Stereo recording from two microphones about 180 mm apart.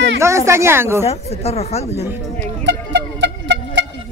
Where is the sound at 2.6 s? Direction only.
75° right (ahead or behind).